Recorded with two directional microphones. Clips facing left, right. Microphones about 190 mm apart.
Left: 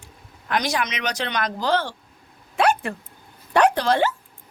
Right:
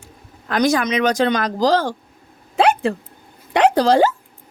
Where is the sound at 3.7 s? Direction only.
35° right (ahead or behind).